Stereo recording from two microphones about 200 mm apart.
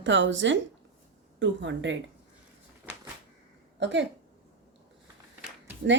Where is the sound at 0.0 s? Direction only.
65° right (ahead or behind).